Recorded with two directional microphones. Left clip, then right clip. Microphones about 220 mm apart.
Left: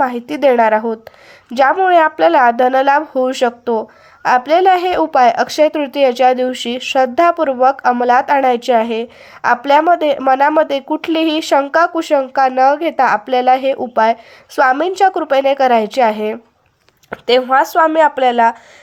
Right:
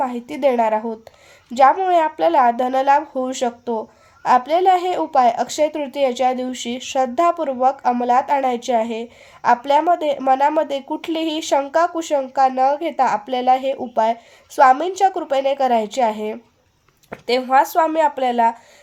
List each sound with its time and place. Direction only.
0.0 s speech: 20° left (ahead or behind)